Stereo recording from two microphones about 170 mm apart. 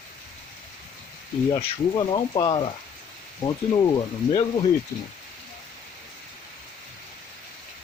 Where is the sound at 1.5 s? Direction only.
30° left (ahead or behind).